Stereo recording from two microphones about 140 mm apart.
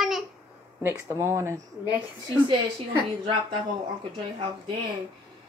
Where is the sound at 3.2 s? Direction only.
35° right (ahead or behind).